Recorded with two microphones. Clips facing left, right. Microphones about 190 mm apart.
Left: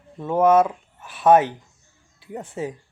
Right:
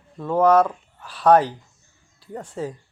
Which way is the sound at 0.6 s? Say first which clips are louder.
Even; 5° left (ahead or behind).